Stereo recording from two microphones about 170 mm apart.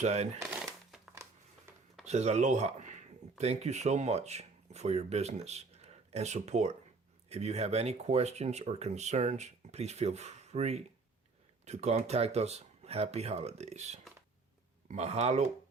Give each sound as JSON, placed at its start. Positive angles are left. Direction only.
{"t": 0.0, "sound": "speech", "side_deg": -40}
{"t": 0.6, "sound": "crumpling", "side_deg": 0}
{"t": 2.0, "sound": "speech", "side_deg": -40}